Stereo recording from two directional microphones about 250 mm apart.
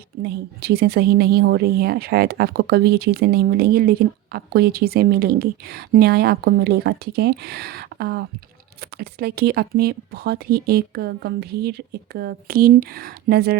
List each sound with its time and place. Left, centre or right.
0.2 s a woman's voice: right